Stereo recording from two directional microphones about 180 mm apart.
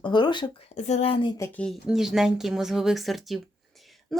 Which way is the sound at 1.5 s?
Centre (ahead or behind).